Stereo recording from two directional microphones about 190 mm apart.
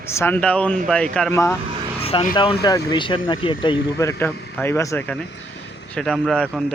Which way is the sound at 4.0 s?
15° left (ahead or behind).